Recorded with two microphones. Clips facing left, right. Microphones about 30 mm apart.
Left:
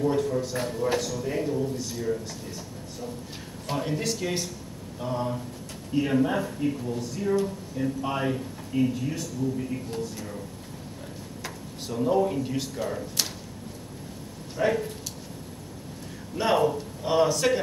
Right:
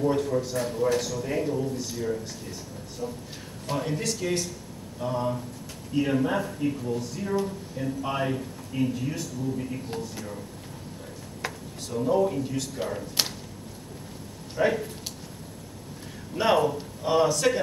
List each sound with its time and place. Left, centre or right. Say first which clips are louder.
0.0 s speech: even; centre
3.6 s speech: even; centre
11.9 s speech: even; centre
12.7 s speech: even; centre
14.6 s speech: even; centre
16.3 s speech: right 1 dB; centre